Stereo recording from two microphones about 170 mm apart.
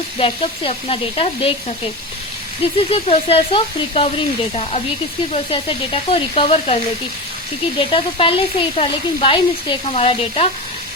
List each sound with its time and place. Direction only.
0.2 s speech: 35° left (ahead or behind)
2.7 s speech: 35° left (ahead or behind)
5.3 s speech: 35° left (ahead or behind)
7.8 s speech: 30° left (ahead or behind)